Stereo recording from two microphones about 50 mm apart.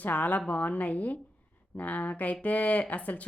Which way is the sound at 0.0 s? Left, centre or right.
Left.